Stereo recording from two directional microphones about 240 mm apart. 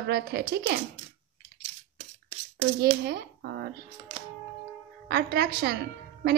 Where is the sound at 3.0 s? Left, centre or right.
Right.